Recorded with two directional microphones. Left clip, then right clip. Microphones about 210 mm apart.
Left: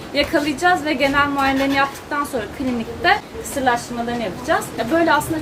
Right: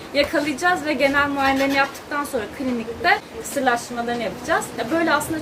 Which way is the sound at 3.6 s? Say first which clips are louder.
Left 2 dB; 5° left (ahead or behind).